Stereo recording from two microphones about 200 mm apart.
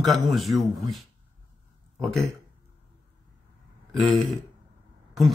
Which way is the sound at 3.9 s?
Centre (ahead or behind).